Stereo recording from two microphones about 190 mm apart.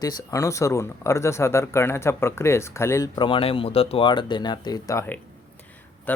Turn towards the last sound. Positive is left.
turn(degrees=10)  # may be behind; listen again after turning